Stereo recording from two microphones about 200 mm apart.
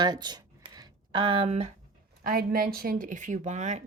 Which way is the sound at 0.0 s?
20° right (ahead or behind).